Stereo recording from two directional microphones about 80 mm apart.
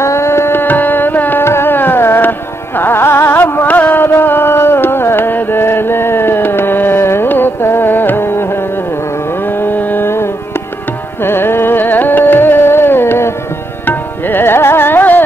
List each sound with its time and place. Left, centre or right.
0.0 s tabla: left
1.4 s music: left
9.5 s carnatic music: left
13.8 s music: left